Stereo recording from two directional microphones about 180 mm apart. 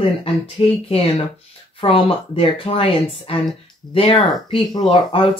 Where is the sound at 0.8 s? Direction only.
30° left (ahead or behind).